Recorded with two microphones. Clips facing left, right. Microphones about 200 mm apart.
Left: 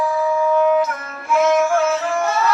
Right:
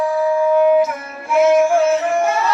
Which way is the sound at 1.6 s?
30° right (ahead or behind).